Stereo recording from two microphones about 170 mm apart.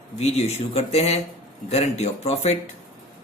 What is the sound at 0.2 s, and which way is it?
Speech, 40° left (ahead or behind).